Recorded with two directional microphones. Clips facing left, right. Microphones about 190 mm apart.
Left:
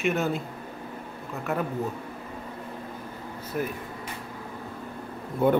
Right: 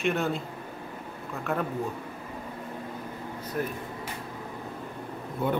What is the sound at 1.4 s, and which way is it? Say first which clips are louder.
Speech: left 1 dB; 5° left (ahead or behind).